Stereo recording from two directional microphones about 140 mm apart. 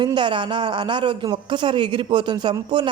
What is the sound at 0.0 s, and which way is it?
A man's voice, 35° right (ahead or behind).